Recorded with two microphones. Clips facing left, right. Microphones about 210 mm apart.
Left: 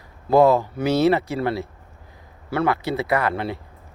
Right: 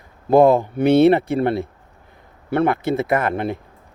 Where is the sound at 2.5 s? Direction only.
55° right (ahead or behind).